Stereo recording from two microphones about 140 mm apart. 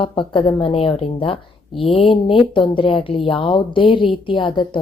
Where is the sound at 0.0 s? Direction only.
35° left (ahead or behind).